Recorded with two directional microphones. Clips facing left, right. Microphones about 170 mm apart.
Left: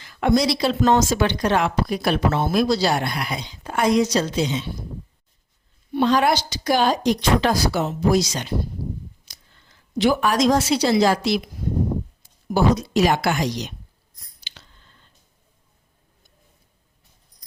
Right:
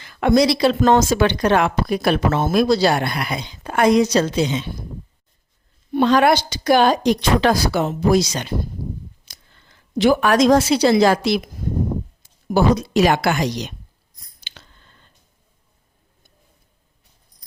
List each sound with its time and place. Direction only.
0.0 s speech: 65° right (ahead or behind)
5.9 s speech: 60° right (ahead or behind)
10.0 s speech: 60° right (ahead or behind)
12.5 s speech: 65° right (ahead or behind)
14.4 s a sound: 55° right (ahead or behind)